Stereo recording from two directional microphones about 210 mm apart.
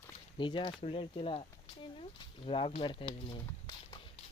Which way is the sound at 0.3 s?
20° left (ahead or behind).